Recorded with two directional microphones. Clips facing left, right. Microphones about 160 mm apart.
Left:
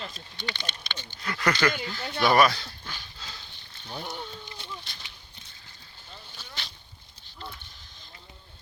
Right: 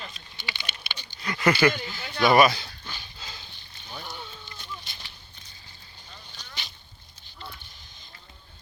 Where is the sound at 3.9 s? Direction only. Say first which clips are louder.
Left 3 dB; 20° left (ahead or behind).